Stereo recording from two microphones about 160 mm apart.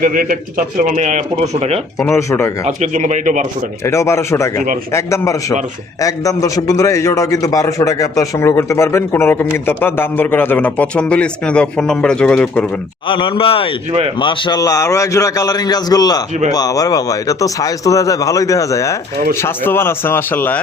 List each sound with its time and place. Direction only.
0.0 s speech: 60° right (ahead or behind); by 1.8 s 40° right (ahead or behind)
2.0 s a man's voice: 20° left (ahead or behind)
2.6 s speech: 50° right (ahead or behind)
3.8 s a man's voice: 15° left (ahead or behind)
13.1 s a man's voice: 30° left (ahead or behind); by 20.6 s 15° left (ahead or behind)